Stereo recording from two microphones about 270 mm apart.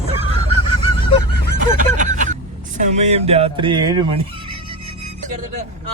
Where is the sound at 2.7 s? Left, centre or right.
Right.